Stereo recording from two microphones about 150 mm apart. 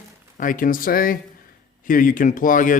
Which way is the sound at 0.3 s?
65° left (ahead or behind).